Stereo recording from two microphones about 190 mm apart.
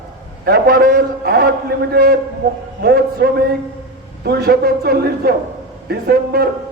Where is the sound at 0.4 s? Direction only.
55° right (ahead or behind).